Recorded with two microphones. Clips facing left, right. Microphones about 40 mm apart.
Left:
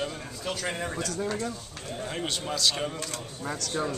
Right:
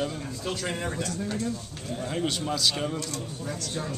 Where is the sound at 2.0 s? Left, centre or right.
Centre.